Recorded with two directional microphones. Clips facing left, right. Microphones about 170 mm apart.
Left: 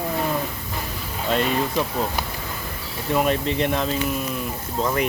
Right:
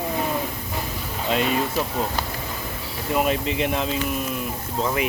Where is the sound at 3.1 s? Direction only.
5° right (ahead or behind).